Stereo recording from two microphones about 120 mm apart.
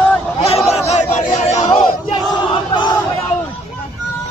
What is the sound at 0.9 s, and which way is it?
Chatter, 75° left (ahead or behind).